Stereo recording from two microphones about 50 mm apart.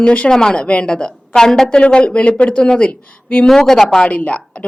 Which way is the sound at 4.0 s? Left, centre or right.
Left.